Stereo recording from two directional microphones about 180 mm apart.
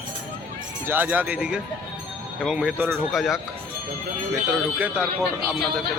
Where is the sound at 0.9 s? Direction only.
10° right (ahead or behind).